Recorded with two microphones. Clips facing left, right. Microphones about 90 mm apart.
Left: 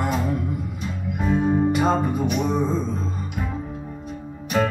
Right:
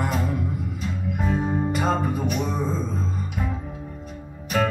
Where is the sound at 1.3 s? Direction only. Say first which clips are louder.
Left 6 dB; 5° left (ahead or behind).